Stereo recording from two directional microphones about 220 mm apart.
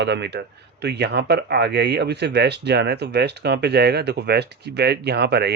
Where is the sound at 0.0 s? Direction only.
50° right (ahead or behind).